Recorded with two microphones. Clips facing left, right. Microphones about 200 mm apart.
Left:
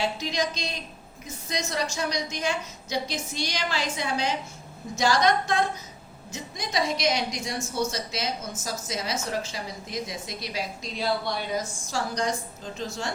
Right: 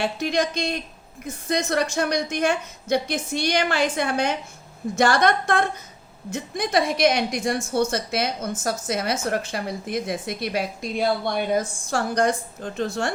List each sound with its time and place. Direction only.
0.0 s a woman's voice: 60° right (ahead or behind)